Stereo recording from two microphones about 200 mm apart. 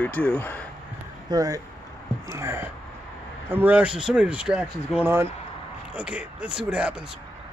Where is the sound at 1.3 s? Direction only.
15° right (ahead or behind).